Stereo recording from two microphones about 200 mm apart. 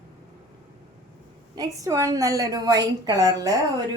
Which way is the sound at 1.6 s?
15° right (ahead or behind).